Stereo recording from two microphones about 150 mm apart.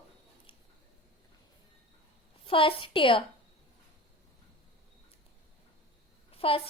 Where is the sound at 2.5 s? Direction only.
35° left (ahead or behind).